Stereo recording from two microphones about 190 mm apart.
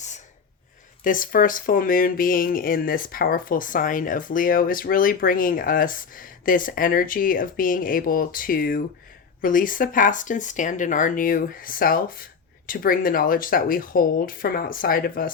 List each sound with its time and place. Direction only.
1.0 s speech: 45° left (ahead or behind)